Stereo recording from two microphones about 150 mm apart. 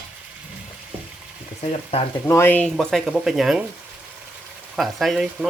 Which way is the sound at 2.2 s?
15° left (ahead or behind).